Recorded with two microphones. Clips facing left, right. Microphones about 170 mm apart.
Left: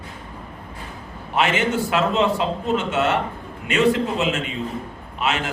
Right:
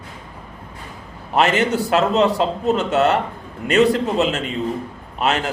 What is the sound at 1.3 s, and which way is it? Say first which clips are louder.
A man's voice: right 3 dB; 40° right (ahead or behind).